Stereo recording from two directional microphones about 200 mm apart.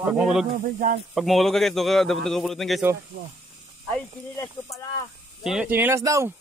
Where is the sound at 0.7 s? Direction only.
40° right (ahead or behind).